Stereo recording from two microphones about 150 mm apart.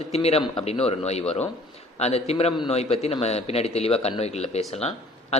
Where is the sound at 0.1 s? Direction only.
45° left (ahead or behind).